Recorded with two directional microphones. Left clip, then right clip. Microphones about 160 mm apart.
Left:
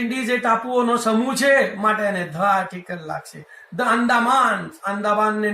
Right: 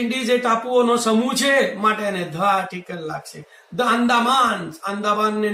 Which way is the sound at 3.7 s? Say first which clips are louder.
Even; 15° right (ahead or behind).